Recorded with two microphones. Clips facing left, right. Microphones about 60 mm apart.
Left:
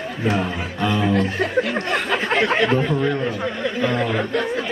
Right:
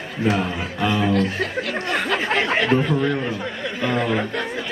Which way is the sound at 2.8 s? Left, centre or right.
Centre.